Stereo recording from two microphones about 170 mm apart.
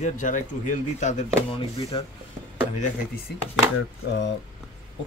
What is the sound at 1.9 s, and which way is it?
Speech, 30° left (ahead or behind).